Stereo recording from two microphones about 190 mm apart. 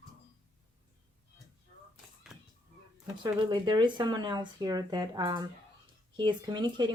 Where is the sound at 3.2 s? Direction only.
25° right (ahead or behind).